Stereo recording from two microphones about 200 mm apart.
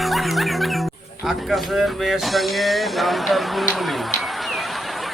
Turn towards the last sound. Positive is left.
turn(degrees=0)  # may be behind; listen again after turning